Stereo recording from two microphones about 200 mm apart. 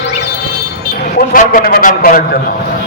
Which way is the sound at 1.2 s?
45° left (ahead or behind).